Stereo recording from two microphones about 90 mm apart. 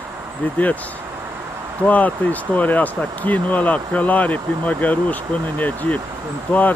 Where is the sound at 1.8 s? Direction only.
15° left (ahead or behind).